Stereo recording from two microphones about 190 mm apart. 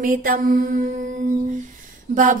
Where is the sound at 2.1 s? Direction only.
40° right (ahead or behind).